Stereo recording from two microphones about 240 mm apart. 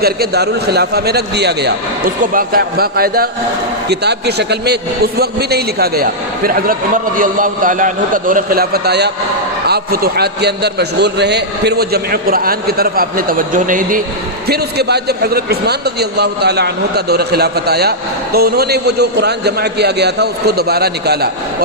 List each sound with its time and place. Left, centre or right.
0.0 s a man's voice: right